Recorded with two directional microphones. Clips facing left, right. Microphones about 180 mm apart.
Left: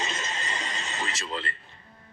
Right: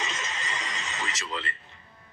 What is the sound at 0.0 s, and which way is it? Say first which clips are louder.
Television: left 2 dB; 35° left (ahead or behind).